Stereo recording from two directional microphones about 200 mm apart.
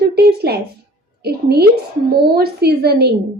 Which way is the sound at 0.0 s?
50° right (ahead or behind).